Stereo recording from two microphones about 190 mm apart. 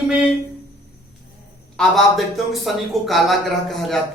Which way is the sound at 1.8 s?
Centre (ahead or behind).